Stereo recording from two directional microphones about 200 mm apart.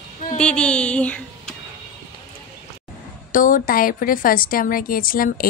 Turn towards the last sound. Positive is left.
turn(degrees=45)  # may be behind; listen again after turning